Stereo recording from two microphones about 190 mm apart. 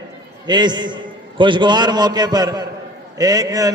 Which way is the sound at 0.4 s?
25° right (ahead or behind).